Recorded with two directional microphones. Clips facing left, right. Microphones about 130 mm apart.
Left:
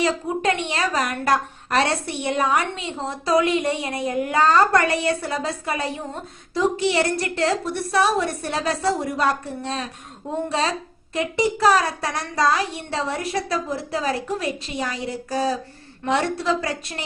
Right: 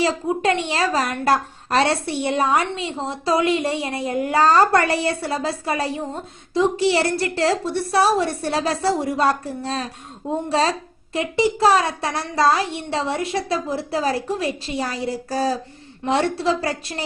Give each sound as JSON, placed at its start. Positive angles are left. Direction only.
{"t": 0.0, "sound": "a woman's voice", "side_deg": -30}
{"t": 11.1, "sound": "a woman's voice", "side_deg": -25}